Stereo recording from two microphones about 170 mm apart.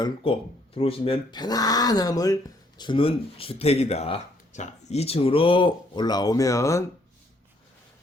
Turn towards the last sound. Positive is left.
turn(degrees=20)  # may be behind; listen again after turning